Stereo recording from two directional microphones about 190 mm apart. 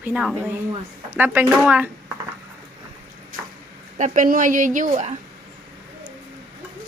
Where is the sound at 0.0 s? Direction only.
5° right (ahead or behind).